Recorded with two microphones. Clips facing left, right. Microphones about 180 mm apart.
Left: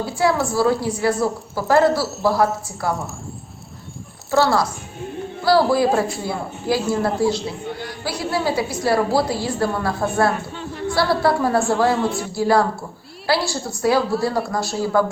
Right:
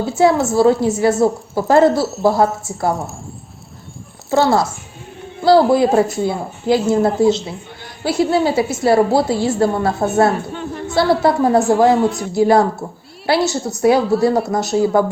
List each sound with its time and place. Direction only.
0.0 s a woman's voice: 25° right (ahead or behind)
2.0 s speech: centre (ahead or behind)
4.3 s a woman's voice: 20° right (ahead or behind)